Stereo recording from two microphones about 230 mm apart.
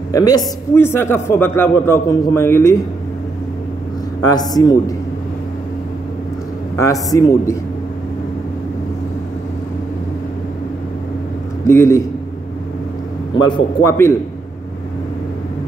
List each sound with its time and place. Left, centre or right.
0.1 s a man's voice: centre
4.2 s a man's voice: centre
6.8 s a man's voice: centre
11.6 s a man's voice: centre
13.4 s a man's voice: centre